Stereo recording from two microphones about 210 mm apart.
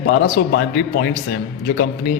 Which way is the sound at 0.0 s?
55° left (ahead or behind).